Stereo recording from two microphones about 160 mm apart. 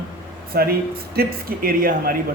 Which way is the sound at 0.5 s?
70° right (ahead or behind).